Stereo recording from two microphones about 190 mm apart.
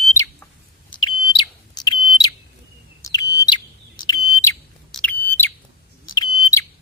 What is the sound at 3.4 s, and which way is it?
Chirp, 20° left (ahead or behind).